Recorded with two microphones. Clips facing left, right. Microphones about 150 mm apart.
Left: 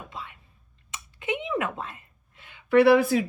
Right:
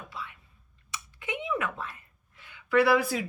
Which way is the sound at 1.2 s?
25° left (ahead or behind).